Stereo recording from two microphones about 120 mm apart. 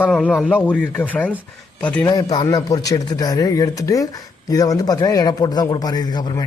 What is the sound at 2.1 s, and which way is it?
A man's voice, 35° left (ahead or behind).